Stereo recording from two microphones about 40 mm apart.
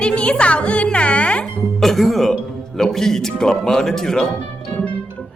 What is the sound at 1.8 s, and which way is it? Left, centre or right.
Speech, centre.